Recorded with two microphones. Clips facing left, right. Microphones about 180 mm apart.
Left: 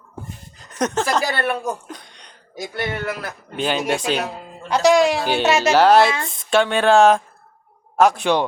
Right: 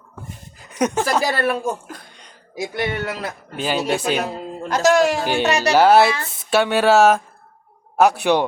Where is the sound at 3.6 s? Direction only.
5° right (ahead or behind).